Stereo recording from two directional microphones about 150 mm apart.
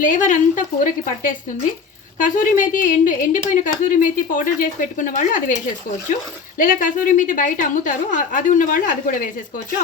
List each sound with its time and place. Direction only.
0.0 s a woman's voice: 60° left (ahead or behind)
6.6 s a woman's voice: 60° left (ahead or behind)